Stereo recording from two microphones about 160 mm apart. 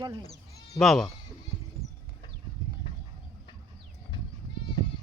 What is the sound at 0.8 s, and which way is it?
Speech, centre (ahead or behind).